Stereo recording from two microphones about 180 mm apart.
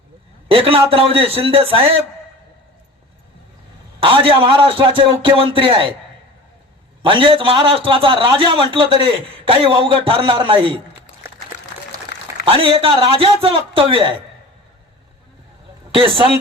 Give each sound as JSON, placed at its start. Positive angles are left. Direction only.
{"t": 0.4, "sound": "a man's voice", "side_deg": -30}
{"t": 4.0, "sound": "a man's voice", "side_deg": -30}
{"t": 7.1, "sound": "a man's voice", "side_deg": -25}
{"t": 12.5, "sound": "a man's voice", "side_deg": -30}
{"t": 15.9, "sound": "a man's voice", "side_deg": -30}